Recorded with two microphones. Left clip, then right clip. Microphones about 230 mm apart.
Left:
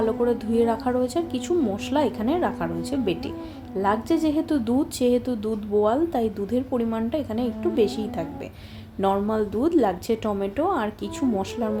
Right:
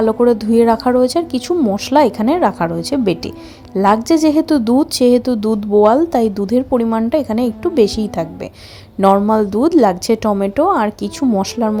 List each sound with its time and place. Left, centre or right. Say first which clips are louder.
0.0 s a woman's voice: right 10 dB; right